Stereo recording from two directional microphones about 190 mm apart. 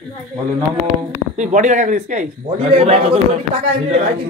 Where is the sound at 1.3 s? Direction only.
40° right (ahead or behind).